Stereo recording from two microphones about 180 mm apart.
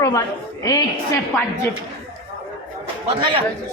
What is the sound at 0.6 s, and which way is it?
Speech, 20° left (ahead or behind).